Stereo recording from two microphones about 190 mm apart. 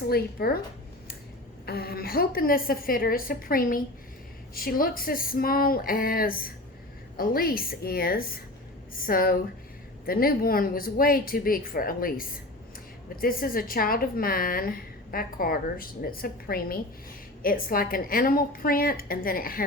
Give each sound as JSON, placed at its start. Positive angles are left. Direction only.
{"t": 0.1, "sound": "a woman's voice", "side_deg": 55}
{"t": 1.6, "sound": "a woman's voice", "side_deg": 55}